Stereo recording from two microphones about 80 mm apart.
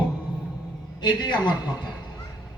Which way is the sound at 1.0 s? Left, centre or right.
Left.